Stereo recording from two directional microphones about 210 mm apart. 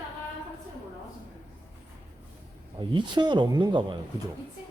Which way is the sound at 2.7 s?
20° right (ahead or behind).